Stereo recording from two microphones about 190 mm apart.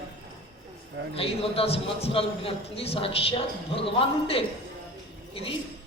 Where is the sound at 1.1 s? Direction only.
30° left (ahead or behind).